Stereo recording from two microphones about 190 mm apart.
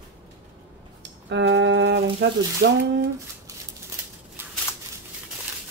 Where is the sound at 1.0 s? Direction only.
75° right (ahead or behind).